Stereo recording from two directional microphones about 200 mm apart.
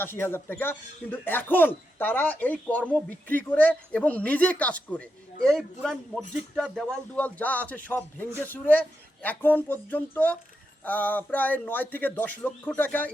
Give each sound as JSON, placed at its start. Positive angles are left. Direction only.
{"t": 0.0, "sound": "speech", "side_deg": 10}